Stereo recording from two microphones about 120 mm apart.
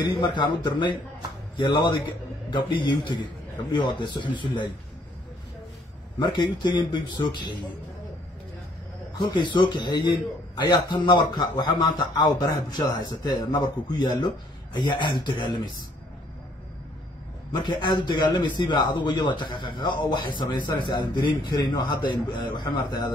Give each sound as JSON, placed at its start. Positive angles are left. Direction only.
{"t": 0.0, "sound": "a man's voice", "side_deg": 40}
{"t": 6.1, "sound": "a man's voice", "side_deg": 40}
{"t": 9.1, "sound": "a man's voice", "side_deg": 40}
{"t": 17.5, "sound": "a man's voice", "side_deg": 40}